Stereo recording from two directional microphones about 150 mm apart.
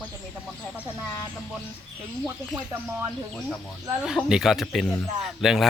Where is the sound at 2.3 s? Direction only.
15° right (ahead or behind).